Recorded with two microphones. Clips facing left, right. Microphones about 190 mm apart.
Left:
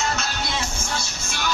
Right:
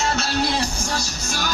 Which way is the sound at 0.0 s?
35° right (ahead or behind).